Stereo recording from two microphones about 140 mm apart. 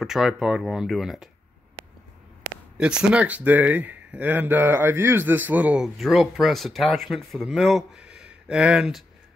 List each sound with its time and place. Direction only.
0.0 s speech: centre (ahead or behind)
2.8 s speech: 5° right (ahead or behind)